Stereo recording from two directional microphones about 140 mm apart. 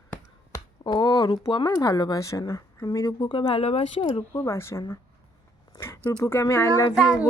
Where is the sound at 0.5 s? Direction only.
30° left (ahead or behind).